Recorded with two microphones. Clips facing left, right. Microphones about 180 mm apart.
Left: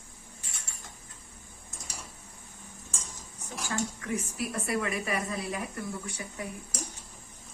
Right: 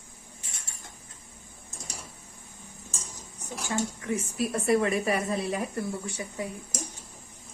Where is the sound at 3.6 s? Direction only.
25° right (ahead or behind).